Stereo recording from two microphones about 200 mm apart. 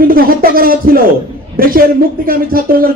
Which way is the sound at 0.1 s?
45° right (ahead or behind).